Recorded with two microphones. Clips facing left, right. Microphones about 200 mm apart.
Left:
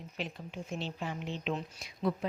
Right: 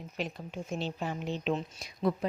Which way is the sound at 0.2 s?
45° right (ahead or behind).